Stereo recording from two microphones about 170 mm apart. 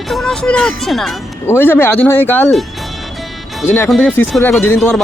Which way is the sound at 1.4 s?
15° left (ahead or behind).